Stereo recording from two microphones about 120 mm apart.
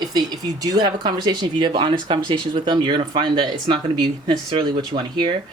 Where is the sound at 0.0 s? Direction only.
35° right (ahead or behind).